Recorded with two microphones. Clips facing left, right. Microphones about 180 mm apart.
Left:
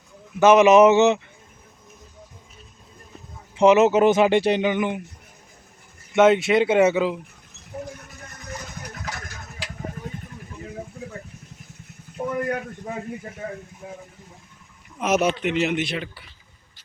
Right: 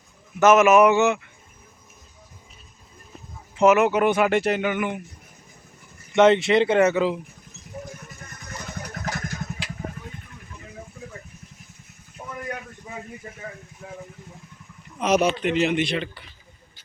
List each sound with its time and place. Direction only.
0.3 s speech: 15° left (ahead or behind)
3.6 s speech: 20° left (ahead or behind)
6.1 s speech: 5° left (ahead or behind)
12.2 s a sound: 60° left (ahead or behind)
13.8 s speech: 25° left (ahead or behind)
14.9 s speech: 5° left (ahead or behind)